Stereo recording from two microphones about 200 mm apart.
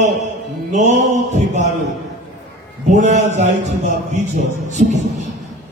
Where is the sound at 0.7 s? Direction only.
35° right (ahead or behind).